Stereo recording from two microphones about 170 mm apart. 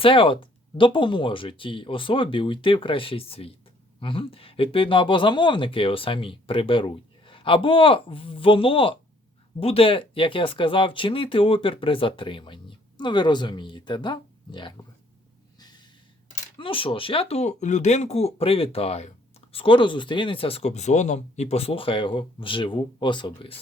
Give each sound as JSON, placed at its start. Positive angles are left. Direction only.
{"t": 0.0, "sound": "speech", "side_deg": 30}
{"t": 16.6, "sound": "speech", "side_deg": 30}